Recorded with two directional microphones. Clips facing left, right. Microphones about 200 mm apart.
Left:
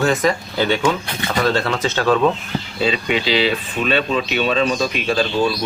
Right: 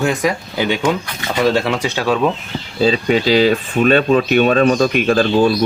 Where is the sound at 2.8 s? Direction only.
40° right (ahead or behind).